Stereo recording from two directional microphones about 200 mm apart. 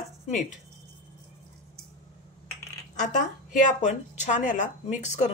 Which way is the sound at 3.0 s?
40° left (ahead or behind).